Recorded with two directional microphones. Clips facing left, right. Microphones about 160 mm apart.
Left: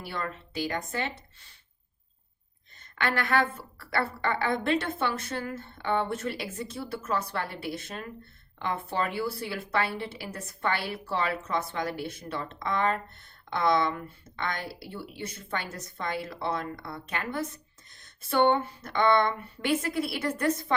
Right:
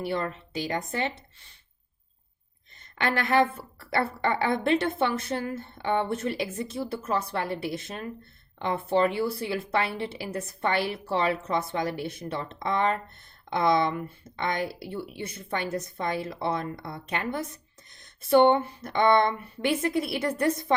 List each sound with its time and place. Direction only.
0.0 s a woman's voice: 20° right (ahead or behind)
3.0 s a woman's voice: 20° right (ahead or behind)